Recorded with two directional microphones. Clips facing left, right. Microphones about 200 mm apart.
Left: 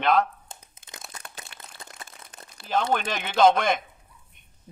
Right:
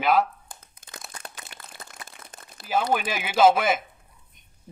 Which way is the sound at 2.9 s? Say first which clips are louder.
Right 1 dB; 5° right (ahead or behind).